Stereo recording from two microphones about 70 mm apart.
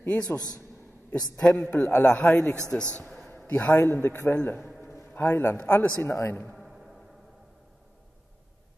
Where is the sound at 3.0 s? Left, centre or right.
Centre.